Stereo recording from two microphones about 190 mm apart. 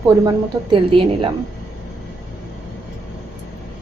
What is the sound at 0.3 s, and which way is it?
A woman's voice, 25° right (ahead or behind).